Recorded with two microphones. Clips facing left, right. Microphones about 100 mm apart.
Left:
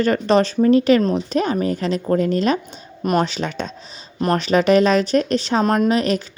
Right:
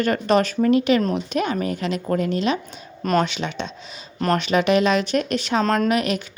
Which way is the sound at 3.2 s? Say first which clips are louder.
Left 2 dB; 40° left (ahead or behind).